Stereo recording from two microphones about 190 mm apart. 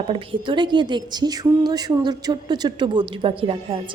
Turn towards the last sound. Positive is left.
turn(degrees=-30)  # may be behind; listen again after turning